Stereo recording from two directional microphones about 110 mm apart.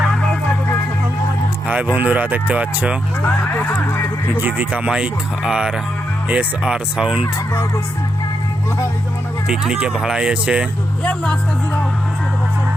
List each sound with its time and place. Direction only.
1.6 s speech: 15° right (ahead or behind)
3.2 s speech: 20° left (ahead or behind)
4.4 s speech: 15° right (ahead or behind)
9.5 s speech: 5° right (ahead or behind)
11.0 s speech: 10° left (ahead or behind)